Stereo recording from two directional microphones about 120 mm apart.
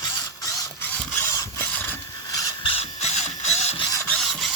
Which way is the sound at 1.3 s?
25° left (ahead or behind).